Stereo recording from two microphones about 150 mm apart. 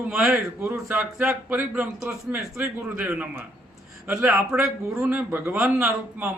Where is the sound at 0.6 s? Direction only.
15° right (ahead or behind).